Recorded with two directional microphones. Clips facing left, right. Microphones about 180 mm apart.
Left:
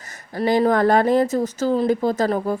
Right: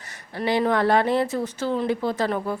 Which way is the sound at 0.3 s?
40° left (ahead or behind).